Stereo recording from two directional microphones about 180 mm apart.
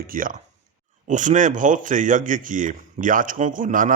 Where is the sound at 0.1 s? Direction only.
50° right (ahead or behind).